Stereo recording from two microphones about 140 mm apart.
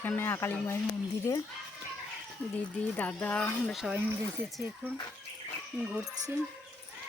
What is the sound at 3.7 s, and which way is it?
Speech, 5° right (ahead or behind).